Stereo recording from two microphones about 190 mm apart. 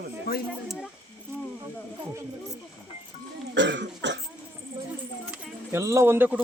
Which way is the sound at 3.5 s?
65° right (ahead or behind).